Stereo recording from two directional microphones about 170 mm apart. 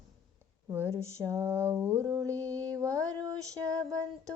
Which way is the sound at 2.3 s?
20° right (ahead or behind).